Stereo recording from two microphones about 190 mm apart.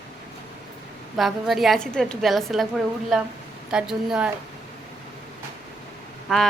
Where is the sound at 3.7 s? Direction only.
5° right (ahead or behind).